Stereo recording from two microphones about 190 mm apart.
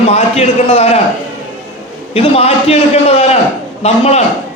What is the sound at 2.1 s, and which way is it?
A man's voice, 30° left (ahead or behind).